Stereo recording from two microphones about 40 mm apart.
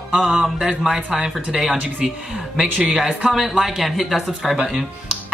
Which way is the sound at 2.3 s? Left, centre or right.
Centre.